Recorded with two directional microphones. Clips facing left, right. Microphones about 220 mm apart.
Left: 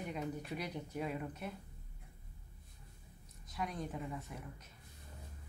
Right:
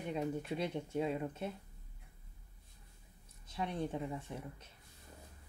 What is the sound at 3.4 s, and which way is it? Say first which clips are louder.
Speech: right 3 dB; 30° right (ahead or behind).